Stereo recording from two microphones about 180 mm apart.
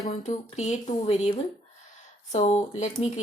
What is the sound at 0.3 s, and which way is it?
A woman's voice, 40° left (ahead or behind).